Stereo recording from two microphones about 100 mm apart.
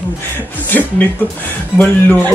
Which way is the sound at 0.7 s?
20° left (ahead or behind).